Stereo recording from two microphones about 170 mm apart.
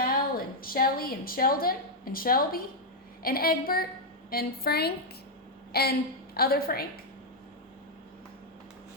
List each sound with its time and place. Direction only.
0.3 s a woman's voice: 60° left (ahead or behind)